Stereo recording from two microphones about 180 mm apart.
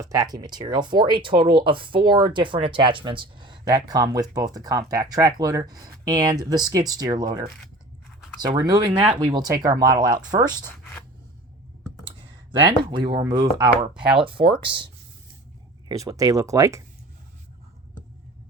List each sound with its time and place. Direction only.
0.0 s speech: 20° right (ahead or behind)
12.0 s speech: 25° right (ahead or behind)
15.9 s speech: 20° right (ahead or behind)